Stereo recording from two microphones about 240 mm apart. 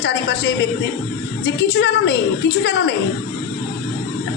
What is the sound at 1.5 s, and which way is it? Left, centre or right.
A man's voice, left.